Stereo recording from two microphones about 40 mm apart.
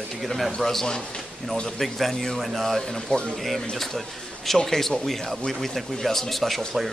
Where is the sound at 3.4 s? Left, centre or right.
Centre.